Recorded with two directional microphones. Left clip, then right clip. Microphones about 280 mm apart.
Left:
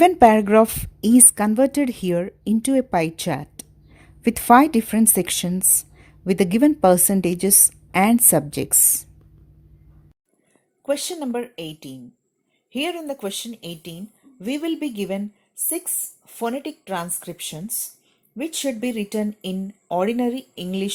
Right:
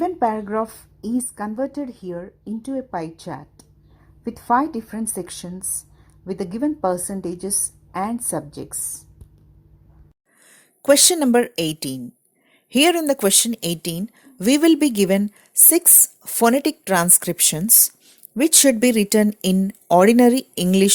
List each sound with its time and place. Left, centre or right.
0.2 s a woman's voice: left
10.8 s speech: right